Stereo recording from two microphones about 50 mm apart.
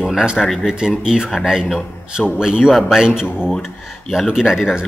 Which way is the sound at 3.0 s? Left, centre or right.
Centre.